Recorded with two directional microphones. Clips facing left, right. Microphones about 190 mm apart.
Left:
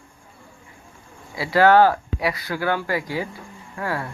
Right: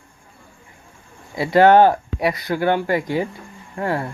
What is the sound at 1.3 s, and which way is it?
Speech, 20° right (ahead or behind).